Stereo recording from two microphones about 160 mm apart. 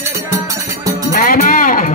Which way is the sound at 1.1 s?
65° left (ahead or behind).